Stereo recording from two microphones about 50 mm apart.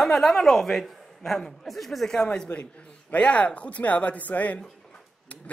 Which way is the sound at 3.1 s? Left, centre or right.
Left.